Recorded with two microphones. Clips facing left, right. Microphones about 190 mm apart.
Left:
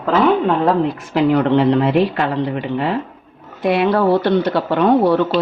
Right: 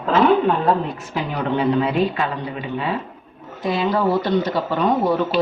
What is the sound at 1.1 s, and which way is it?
Speech, 70° left (ahead or behind).